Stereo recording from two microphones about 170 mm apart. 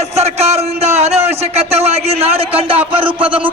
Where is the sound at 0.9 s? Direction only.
40° right (ahead or behind).